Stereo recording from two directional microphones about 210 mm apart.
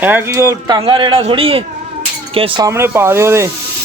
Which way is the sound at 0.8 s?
25° right (ahead or behind).